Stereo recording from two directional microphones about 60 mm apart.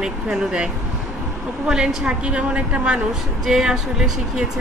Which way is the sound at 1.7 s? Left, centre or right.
Centre.